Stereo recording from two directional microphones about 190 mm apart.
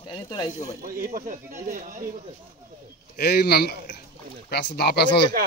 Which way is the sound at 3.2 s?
55° left (ahead or behind).